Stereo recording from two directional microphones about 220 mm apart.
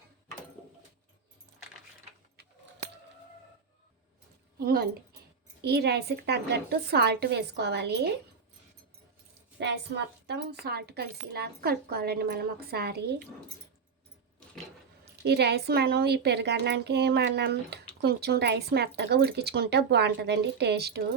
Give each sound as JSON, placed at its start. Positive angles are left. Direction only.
{"t": 4.6, "sound": "a woman's voice", "side_deg": -45}
{"t": 9.6, "sound": "a woman's voice", "side_deg": -50}
{"t": 15.0, "sound": "a woman's voice", "side_deg": -50}